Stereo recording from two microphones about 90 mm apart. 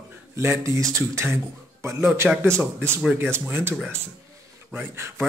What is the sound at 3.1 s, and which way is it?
Speech, 20° right (ahead or behind).